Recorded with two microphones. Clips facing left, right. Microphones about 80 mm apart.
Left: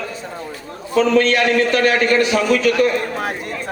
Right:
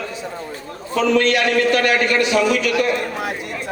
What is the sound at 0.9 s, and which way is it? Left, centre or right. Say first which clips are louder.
A man's voice: left 2 dB; left.